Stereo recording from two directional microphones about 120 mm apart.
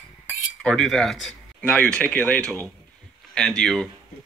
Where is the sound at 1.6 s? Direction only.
10° left (ahead or behind).